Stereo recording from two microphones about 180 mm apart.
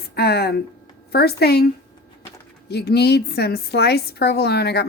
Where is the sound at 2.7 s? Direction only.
65° left (ahead or behind).